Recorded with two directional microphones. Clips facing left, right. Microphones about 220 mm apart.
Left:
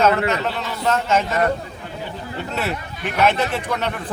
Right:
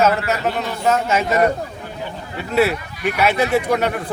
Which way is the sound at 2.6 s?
10° right (ahead or behind).